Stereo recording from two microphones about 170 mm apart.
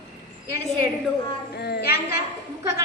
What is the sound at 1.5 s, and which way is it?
Speech, 70° left (ahead or behind).